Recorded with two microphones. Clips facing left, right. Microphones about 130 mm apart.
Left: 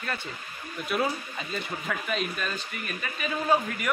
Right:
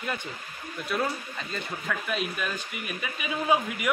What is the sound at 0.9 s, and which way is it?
Speech, 5° left (ahead or behind).